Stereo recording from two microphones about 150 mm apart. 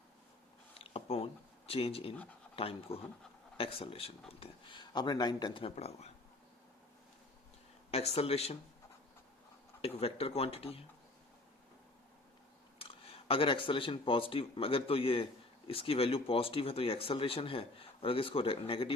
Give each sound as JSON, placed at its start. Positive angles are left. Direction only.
{"t": 0.7, "sound": "a sound", "side_deg": 40}
{"t": 2.6, "sound": "speech", "side_deg": 40}
{"t": 7.9, "sound": "speech", "side_deg": 45}
{"t": 9.8, "sound": "speech", "side_deg": 40}
{"t": 12.8, "sound": "speech", "side_deg": 40}